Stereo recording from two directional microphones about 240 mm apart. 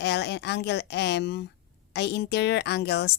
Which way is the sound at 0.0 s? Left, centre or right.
Left.